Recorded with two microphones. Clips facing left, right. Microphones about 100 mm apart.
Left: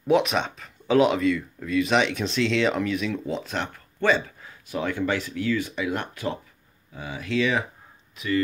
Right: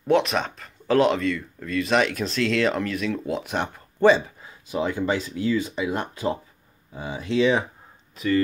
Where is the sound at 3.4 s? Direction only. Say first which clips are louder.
Right 3 dB; 15° right (ahead or behind).